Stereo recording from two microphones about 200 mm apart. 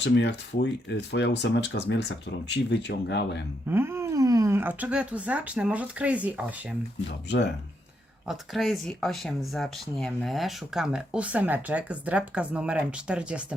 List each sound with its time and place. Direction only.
0.0 s speech: 60° left (ahead or behind)
3.7 s speech: 10° right (ahead or behind)
7.3 s speech: 60° left (ahead or behind)
8.3 s speech: centre (ahead or behind)